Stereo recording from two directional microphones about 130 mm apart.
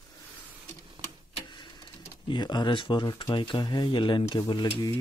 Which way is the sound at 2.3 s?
35° left (ahead or behind).